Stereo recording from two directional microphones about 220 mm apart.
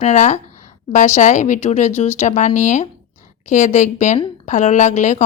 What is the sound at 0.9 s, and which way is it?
A woman's voice, 30° left (ahead or behind).